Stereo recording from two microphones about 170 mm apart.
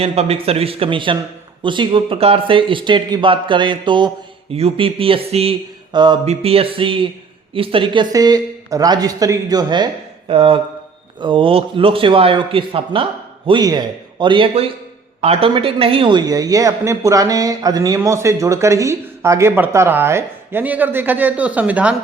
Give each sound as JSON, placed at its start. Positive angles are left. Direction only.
{"t": 0.0, "sound": "a man's voice", "side_deg": -35}